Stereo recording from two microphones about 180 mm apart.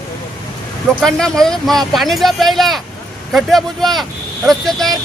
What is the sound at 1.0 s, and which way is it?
Speech, 5° left (ahead or behind).